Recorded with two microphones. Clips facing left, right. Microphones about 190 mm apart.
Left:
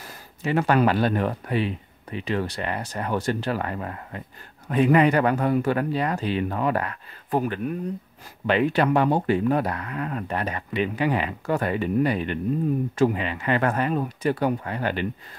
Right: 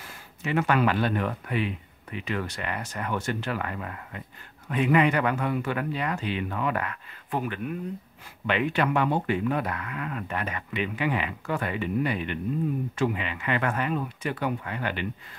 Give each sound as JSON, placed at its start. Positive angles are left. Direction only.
{"t": 0.0, "sound": "speech", "side_deg": 35}